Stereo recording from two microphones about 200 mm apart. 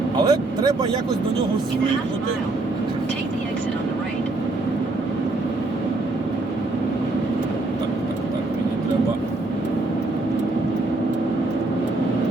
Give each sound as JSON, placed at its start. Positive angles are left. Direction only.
{"t": 0.2, "sound": "speech", "side_deg": -20}